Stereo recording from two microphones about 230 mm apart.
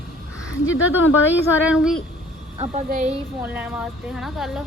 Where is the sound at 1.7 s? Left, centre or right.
Centre.